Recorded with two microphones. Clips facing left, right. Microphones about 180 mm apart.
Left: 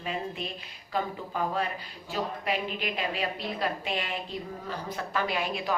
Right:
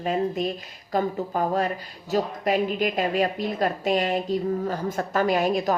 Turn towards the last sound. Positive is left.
turn(degrees=-45)  # may be behind; listen again after turning